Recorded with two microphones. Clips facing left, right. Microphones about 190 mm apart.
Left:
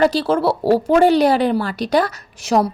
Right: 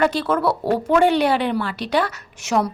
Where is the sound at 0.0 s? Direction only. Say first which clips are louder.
Left 3 dB; 35° left (ahead or behind).